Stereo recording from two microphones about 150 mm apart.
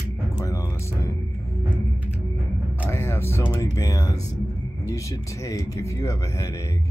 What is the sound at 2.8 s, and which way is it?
Music, 15° left (ahead or behind).